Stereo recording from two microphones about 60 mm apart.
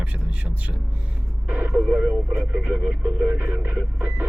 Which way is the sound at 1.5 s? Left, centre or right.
Right.